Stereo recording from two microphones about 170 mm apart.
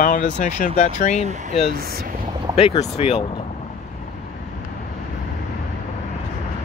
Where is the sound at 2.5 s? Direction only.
35° left (ahead or behind).